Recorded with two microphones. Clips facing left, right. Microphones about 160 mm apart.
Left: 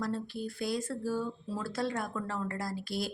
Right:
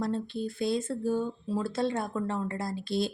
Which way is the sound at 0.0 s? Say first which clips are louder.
Right 4 dB; 25° right (ahead or behind).